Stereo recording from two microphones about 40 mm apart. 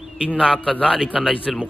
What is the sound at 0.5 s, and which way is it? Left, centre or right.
Speech, left.